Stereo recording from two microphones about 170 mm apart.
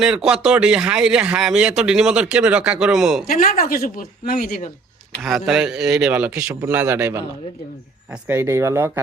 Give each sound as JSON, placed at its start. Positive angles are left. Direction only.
{"t": 0.0, "sound": "speech", "side_deg": -5}
{"t": 3.4, "sound": "speech", "side_deg": 55}
{"t": 5.2, "sound": "speech", "side_deg": 0}